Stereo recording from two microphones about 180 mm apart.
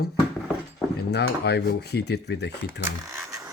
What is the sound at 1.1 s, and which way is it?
Speech, 70° left (ahead or behind).